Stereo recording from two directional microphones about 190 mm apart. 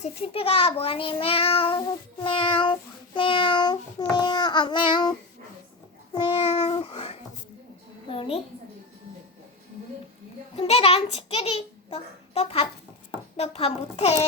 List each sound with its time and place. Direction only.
0.0 s child singing: 30° left (ahead or behind)
3.2 s a child's voice: 25° left (ahead or behind)
4.1 s child singing: 25° left (ahead or behind)
6.1 s child singing: 25° left (ahead or behind)
10.5 s a child's voice: 30° left (ahead or behind)